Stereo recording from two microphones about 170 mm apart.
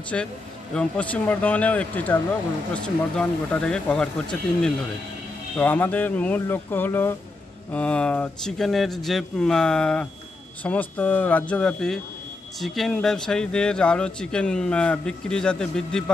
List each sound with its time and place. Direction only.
0.1 s speech: 5° left (ahead or behind)